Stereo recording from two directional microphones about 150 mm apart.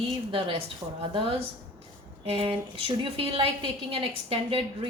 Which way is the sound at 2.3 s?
35° right (ahead or behind).